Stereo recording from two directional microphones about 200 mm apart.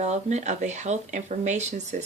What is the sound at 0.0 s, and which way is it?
A woman's voice, 35° right (ahead or behind).